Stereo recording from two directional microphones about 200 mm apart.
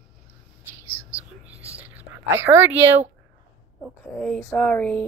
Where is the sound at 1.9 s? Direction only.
10° right (ahead or behind).